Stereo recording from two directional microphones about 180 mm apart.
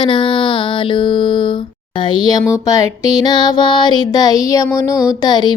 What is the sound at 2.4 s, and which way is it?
Speech, 20° left (ahead or behind).